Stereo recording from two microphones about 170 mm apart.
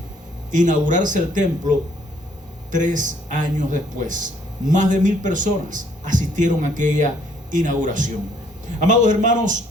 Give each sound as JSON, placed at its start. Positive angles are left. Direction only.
{"t": 0.5, "sound": "speech", "side_deg": -50}
{"t": 2.7, "sound": "speech", "side_deg": -50}